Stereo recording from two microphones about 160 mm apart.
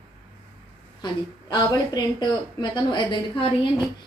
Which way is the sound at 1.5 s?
25° left (ahead or behind).